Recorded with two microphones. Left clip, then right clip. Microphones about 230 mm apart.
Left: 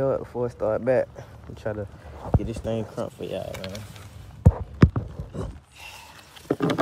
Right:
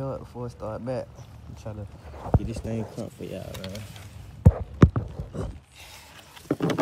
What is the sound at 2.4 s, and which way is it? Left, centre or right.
Speech, centre.